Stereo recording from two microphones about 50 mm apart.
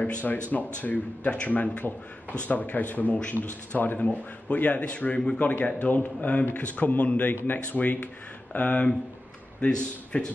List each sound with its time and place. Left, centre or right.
0.0 s a man's voice: left